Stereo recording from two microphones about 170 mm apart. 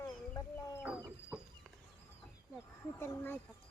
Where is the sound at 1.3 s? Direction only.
Centre (ahead or behind).